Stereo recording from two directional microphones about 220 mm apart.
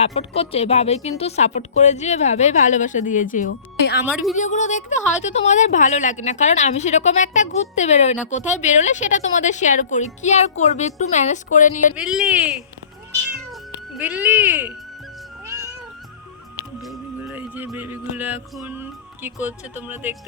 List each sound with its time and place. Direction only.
0.0 s a woman's voice: 30° left (ahead or behind)
4.0 s speech: 5° right (ahead or behind)
4.4 s a woman's voice: 35° left (ahead or behind)
11.9 s speech: 5° right (ahead or behind)
13.9 s speech: 5° right (ahead or behind)
15.4 s cat: 15° right (ahead or behind)
16.8 s music: centre (ahead or behind)